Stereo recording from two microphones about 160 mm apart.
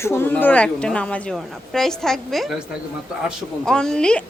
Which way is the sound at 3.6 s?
5° left (ahead or behind).